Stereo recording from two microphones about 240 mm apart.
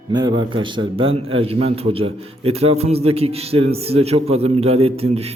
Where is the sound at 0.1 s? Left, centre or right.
Centre.